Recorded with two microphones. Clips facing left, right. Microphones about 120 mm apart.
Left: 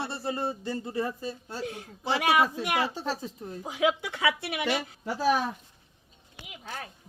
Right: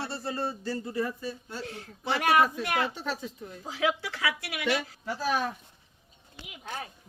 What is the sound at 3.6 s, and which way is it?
Speech, 20° left (ahead or behind).